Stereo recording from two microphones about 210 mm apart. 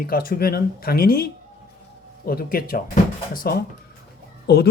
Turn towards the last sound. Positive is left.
turn(degrees=50)  # may be behind; listen again after turning